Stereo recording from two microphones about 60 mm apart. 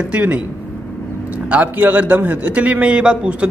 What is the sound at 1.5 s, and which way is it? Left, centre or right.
A man's voice, right.